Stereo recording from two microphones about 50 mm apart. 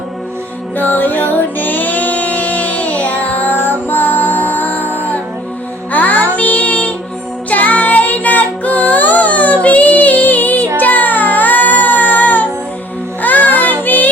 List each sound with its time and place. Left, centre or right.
0.8 s music: left
5.9 s child singing: left
7.5 s music: left
10.8 s child singing: left
13.2 s music: left